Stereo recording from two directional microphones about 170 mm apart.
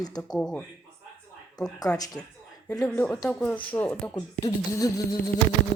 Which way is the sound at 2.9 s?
5° left (ahead or behind).